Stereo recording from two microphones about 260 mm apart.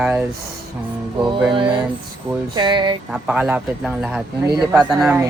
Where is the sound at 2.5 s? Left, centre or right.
Centre.